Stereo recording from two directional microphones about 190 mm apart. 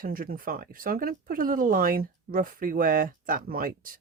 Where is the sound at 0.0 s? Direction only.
50° right (ahead or behind).